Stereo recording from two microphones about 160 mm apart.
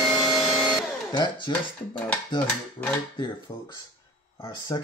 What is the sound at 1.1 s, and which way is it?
Speech, 30° left (ahead or behind).